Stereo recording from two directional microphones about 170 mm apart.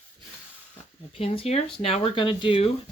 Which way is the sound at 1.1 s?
35° left (ahead or behind).